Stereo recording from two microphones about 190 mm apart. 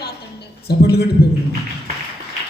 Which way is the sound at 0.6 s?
60° left (ahead or behind).